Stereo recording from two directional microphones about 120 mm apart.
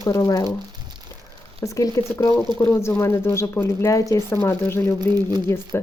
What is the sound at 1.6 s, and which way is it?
Speech, 25° left (ahead or behind).